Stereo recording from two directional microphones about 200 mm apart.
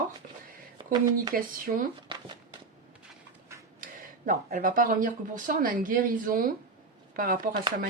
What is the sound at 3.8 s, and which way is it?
Speech, 45° right (ahead or behind).